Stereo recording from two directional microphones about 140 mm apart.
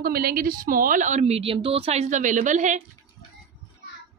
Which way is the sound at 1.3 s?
40° right (ahead or behind).